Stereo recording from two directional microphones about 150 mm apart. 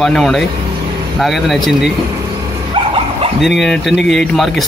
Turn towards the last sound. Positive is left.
turn(degrees=0)  # may be behind; listen again after turning